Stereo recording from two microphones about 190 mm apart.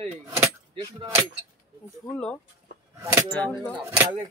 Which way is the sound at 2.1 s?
5° left (ahead or behind).